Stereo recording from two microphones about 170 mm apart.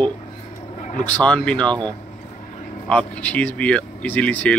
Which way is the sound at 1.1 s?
10° left (ahead or behind).